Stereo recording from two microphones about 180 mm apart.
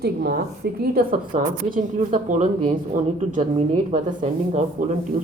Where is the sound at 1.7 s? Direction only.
45° right (ahead or behind).